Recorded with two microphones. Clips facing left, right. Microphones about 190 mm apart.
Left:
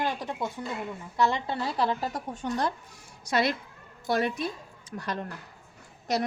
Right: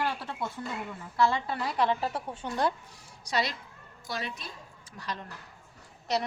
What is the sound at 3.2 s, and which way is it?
A woman's voice, 55° left (ahead or behind).